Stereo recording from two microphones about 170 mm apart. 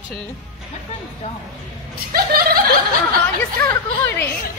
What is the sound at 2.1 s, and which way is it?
Speech, 60° right (ahead or behind).